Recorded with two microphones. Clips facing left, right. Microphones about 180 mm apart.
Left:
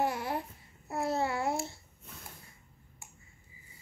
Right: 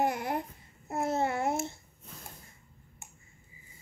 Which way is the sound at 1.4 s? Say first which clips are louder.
Right 2 dB; 20° right (ahead or behind).